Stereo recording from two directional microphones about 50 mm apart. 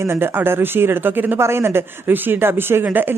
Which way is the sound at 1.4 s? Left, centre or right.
Right.